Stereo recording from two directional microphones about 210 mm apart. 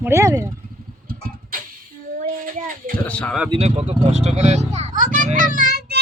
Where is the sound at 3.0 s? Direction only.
5° left (ahead or behind).